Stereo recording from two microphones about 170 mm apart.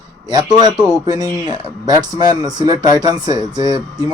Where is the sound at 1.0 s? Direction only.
20° right (ahead or behind).